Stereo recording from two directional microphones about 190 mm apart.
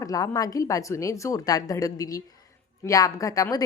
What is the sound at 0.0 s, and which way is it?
A woman's voice, 20° left (ahead or behind).